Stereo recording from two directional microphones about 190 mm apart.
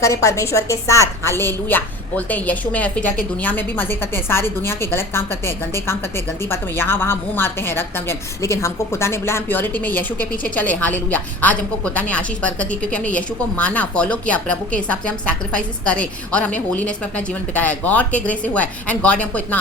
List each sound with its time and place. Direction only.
0.0 s a woman's voice: 15° left (ahead or behind)